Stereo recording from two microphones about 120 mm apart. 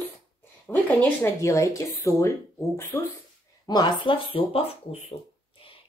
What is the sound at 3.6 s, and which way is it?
Speech, 35° left (ahead or behind).